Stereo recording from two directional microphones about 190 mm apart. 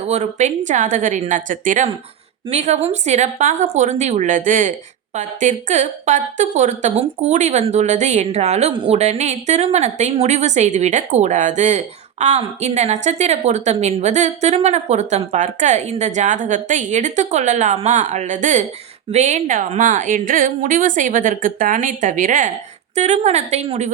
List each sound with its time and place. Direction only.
0.0 s a woman's voice: 35° right (ahead or behind)